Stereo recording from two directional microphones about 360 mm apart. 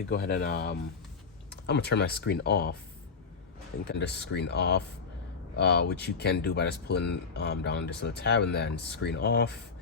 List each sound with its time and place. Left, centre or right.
0.1 s speech: left
3.8 s speech: left